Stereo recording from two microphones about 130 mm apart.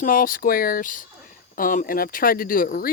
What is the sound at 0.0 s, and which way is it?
Speech, 90° left.